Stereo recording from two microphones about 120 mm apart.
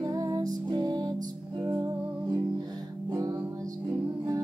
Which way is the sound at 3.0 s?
30° right (ahead or behind).